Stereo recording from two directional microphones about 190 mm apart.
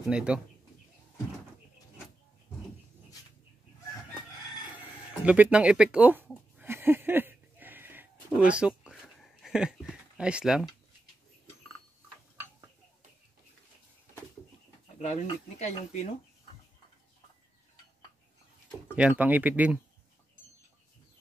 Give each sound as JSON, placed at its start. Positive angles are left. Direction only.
{"t": 0.1, "sound": "speech", "side_deg": -5}
{"t": 5.2, "sound": "speech", "side_deg": -5}
{"t": 6.6, "sound": "a sound", "side_deg": -10}
{"t": 15.0, "sound": "speech", "side_deg": 35}
{"t": 18.9, "sound": "speech", "side_deg": -5}